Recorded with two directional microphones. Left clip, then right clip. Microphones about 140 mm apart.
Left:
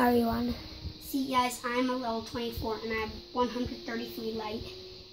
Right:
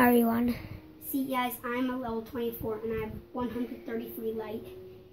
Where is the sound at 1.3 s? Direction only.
10° left (ahead or behind).